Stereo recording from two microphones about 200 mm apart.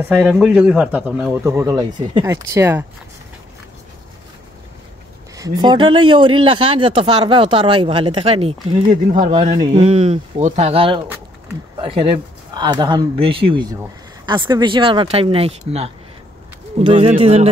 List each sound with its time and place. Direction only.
0.3 s a man's voice: 5° right (ahead or behind)
5.3 s speech: 20° right (ahead or behind)
16.8 s speech: 25° right (ahead or behind)